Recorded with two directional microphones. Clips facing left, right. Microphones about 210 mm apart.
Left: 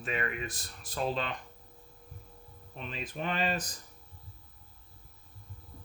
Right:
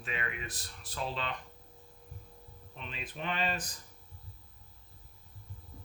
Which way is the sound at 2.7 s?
40° left (ahead or behind).